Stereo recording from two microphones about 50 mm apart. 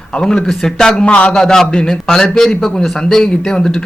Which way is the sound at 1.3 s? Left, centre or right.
Centre.